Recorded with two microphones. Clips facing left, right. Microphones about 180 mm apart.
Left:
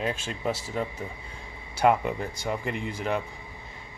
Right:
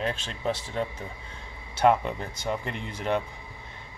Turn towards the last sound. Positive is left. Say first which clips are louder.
# even
turn(degrees=5)  # may be behind; listen again after turning